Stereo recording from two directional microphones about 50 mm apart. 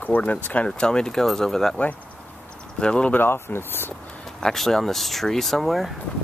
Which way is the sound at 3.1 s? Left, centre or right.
Left.